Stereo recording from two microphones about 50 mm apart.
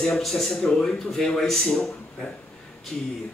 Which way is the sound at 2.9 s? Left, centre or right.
Centre.